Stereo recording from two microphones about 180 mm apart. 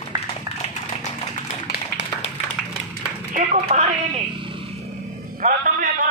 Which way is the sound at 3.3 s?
45° right (ahead or behind).